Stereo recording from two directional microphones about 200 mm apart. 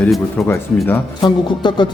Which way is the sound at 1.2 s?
20° left (ahead or behind).